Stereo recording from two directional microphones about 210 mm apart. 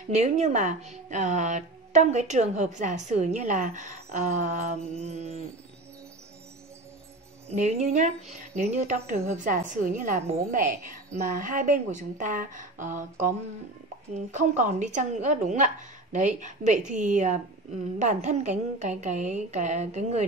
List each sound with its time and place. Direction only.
0.0 s speech: 30° right (ahead or behind)
7.4 s speech: 30° right (ahead or behind)